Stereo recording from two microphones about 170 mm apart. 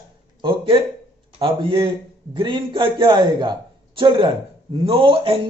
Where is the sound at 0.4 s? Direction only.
30° right (ahead or behind).